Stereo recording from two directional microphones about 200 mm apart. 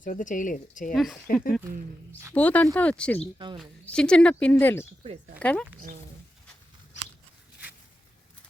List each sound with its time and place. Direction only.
0.0 s speech: 40° left (ahead or behind)
0.9 s speech: centre (ahead or behind)
3.3 s speech: 25° right (ahead or behind)
3.6 s speech: 5° left (ahead or behind)